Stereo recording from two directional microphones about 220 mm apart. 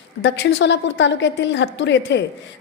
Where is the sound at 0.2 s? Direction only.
55° left (ahead or behind).